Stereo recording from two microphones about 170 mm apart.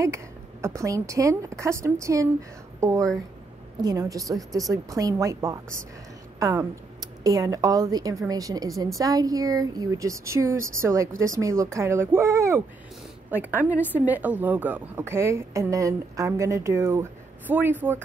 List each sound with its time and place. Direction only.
0.0 s a woman's voice: 15° right (ahead or behind)